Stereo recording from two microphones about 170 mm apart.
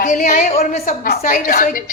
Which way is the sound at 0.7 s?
60° left (ahead or behind).